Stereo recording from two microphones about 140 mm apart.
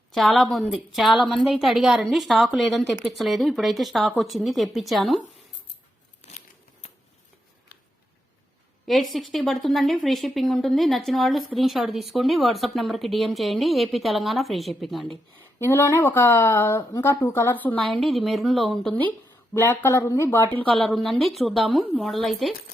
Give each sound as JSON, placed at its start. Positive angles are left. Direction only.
{"t": 0.1, "sound": "a woman's voice", "side_deg": 0}
{"t": 8.9, "sound": "a woman's voice", "side_deg": 0}
{"t": 15.5, "sound": "speech", "side_deg": 20}
{"t": 17.7, "sound": "a woman's voice", "side_deg": 0}
{"t": 19.5, "sound": "speech", "side_deg": 20}
{"t": 20.8, "sound": "a woman's voice", "side_deg": 0}